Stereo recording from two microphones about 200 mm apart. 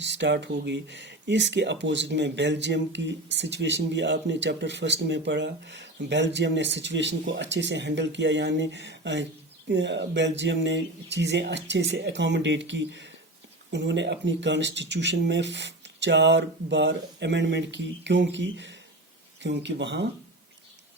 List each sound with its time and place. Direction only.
0.0 s speech: 60° right (ahead or behind)